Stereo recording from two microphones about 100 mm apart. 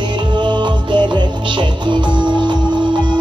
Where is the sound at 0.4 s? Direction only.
50° right (ahead or behind).